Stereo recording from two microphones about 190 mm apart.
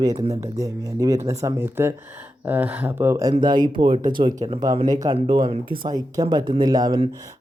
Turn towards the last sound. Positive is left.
turn(degrees=-20)  # may be behind; listen again after turning